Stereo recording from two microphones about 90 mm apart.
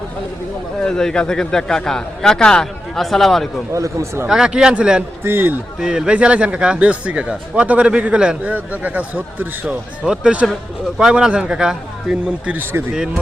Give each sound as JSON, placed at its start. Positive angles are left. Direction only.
{"t": 0.8, "sound": "speech", "side_deg": 5}
{"t": 3.7, "sound": "speech", "side_deg": -35}
{"t": 4.3, "sound": "speech", "side_deg": -5}
{"t": 5.2, "sound": "a man's voice", "side_deg": -25}
{"t": 5.8, "sound": "speech", "side_deg": -5}